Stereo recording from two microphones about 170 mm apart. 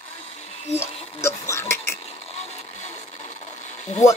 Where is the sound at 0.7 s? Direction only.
15° left (ahead or behind).